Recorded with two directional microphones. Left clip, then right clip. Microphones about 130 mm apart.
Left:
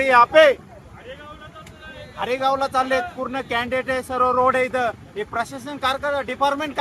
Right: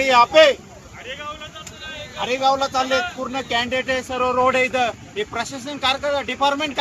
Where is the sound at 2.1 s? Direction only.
5° left (ahead or behind).